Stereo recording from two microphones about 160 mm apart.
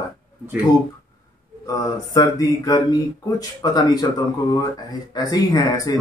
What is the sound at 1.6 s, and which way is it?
Mantra, 25° left (ahead or behind).